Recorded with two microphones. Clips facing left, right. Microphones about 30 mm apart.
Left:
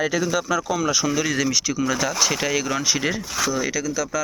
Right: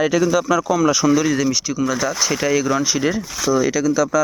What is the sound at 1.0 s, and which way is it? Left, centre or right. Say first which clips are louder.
Speech: right 8 dB; right.